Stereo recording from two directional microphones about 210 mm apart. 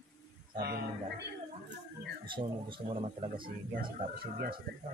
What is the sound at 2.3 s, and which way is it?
Speech, 25° right (ahead or behind).